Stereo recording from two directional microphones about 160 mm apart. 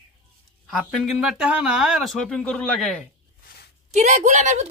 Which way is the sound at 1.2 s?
5° right (ahead or behind).